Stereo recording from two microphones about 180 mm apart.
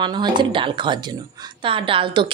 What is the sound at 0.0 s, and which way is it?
A woman's voice, 25° right (ahead or behind).